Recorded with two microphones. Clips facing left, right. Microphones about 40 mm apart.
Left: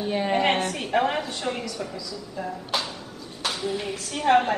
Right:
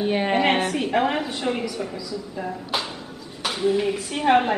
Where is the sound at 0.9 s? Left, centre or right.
Centre.